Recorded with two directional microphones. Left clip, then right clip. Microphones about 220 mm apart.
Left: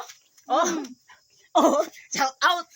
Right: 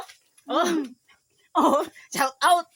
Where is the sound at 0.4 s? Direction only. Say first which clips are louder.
Left 1 dB; 40° right (ahead or behind).